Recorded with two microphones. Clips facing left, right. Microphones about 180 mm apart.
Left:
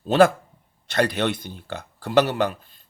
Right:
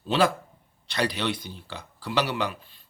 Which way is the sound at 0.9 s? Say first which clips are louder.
Left 5 dB; 50° left (ahead or behind).